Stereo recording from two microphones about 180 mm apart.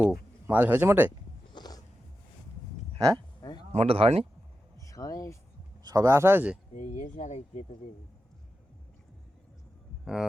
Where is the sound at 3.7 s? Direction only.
35° right (ahead or behind).